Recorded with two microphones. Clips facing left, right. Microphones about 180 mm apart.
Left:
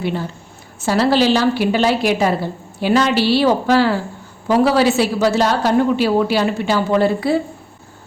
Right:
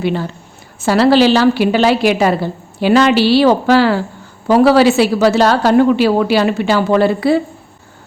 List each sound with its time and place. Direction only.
0.9 s a woman's voice: 90° right